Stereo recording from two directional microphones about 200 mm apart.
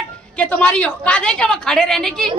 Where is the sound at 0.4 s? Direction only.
5° left (ahead or behind).